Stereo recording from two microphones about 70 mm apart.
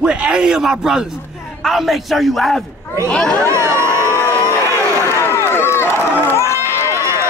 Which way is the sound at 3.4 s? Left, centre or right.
Right.